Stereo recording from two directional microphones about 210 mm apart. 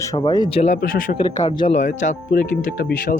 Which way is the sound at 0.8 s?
40° left (ahead or behind).